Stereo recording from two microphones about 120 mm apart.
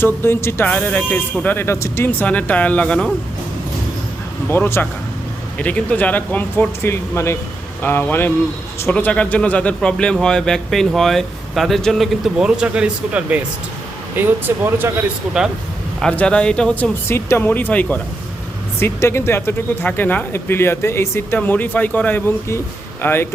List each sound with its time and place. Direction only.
0.0 s speech: 20° left (ahead or behind)
4.4 s speech: 20° left (ahead or behind); by 15.0 s 20° right (ahead or behind)
16.0 s speech: 10° left (ahead or behind)
17.1 s speech: 20° left (ahead or behind)